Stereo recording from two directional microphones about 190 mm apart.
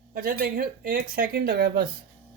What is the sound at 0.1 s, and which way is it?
A woman's voice, 50° right (ahead or behind).